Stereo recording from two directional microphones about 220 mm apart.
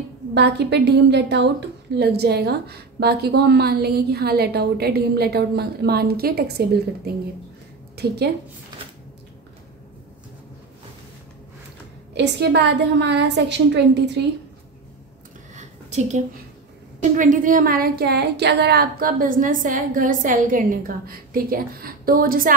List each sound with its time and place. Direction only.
0.3 s a woman's voice: 50° right (ahead or behind)
12.1 s a woman's voice: 50° right (ahead or behind)
15.5 s a sound: 30° right (ahead or behind)
17.1 s a woman's voice: 35° right (ahead or behind)